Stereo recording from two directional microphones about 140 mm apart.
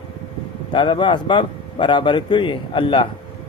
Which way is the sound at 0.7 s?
35° left (ahead or behind).